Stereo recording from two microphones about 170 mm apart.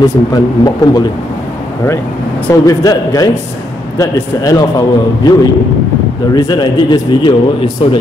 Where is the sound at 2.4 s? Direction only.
20° left (ahead or behind).